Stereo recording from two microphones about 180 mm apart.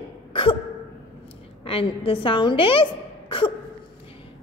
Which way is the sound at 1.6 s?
30° left (ahead or behind).